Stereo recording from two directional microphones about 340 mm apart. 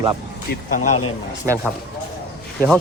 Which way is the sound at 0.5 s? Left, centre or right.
Left.